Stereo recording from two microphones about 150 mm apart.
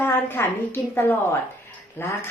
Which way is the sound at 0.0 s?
15° left (ahead or behind).